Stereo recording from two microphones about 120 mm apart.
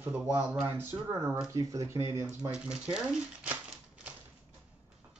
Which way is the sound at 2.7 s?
10° right (ahead or behind).